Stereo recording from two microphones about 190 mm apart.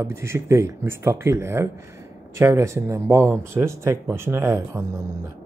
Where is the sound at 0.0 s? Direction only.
15° right (ahead or behind).